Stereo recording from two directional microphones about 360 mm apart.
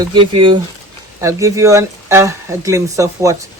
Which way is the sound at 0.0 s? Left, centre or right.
Centre.